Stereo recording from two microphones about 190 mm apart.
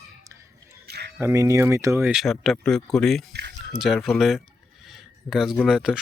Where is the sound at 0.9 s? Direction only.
60° right (ahead or behind).